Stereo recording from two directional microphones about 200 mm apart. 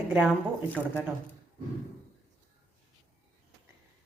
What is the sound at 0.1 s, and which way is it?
Speech, 5° right (ahead or behind).